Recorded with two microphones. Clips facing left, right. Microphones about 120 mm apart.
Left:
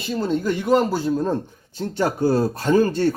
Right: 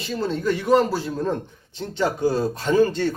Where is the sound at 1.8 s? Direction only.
45° left (ahead or behind).